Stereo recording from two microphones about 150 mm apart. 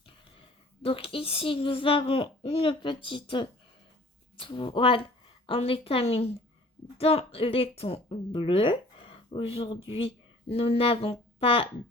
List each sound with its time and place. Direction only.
0.0 s speech: 35° left (ahead or behind)